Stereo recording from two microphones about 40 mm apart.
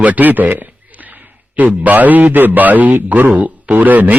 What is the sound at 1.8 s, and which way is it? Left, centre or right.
A man's voice, right.